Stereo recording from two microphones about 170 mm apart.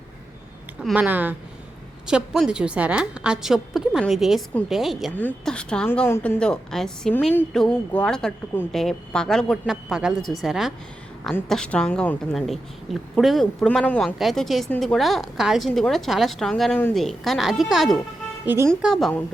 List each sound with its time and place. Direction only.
0.8 s a woman's voice: 5° right (ahead or behind)
18.4 s a woman's voice: 15° right (ahead or behind)
18.7 s a woman's voice: centre (ahead or behind)